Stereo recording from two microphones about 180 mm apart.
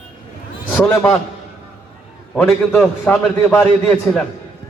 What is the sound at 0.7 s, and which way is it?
Speech, 10° left (ahead or behind).